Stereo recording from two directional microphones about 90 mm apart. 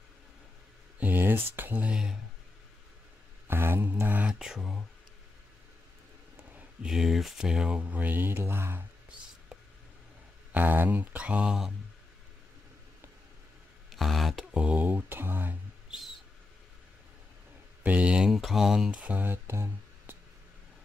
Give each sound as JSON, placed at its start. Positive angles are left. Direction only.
{"t": 0.9, "sound": "speech", "side_deg": -20}
{"t": 3.4, "sound": "speech", "side_deg": -25}
{"t": 6.8, "sound": "speech", "side_deg": -5}
{"t": 10.5, "sound": "speech", "side_deg": -20}
{"t": 13.8, "sound": "beatboxing", "side_deg": 0}
{"t": 14.6, "sound": "speech", "side_deg": -15}
{"t": 17.8, "sound": "speech", "side_deg": -15}
{"t": 19.0, "sound": "speech", "side_deg": -20}